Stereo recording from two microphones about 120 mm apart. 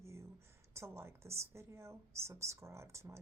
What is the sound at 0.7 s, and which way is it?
Speech, 20° right (ahead or behind).